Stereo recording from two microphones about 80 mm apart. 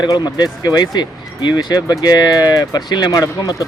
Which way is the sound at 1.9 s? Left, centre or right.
Left.